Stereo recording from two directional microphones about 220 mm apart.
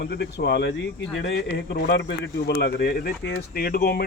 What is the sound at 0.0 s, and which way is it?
Speech, 50° left (ahead or behind).